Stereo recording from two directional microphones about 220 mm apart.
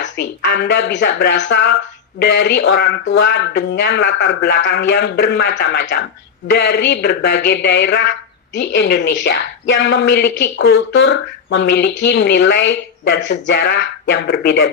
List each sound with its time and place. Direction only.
0.0 s speech: 55° left (ahead or behind)